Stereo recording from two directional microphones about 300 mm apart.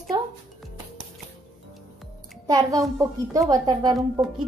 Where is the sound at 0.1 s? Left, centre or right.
Centre.